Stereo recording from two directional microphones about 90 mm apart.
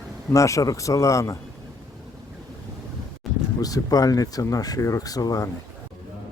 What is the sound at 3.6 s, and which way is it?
Speech, 45° left (ahead or behind).